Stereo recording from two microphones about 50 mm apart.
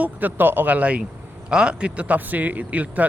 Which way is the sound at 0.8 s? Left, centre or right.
Right.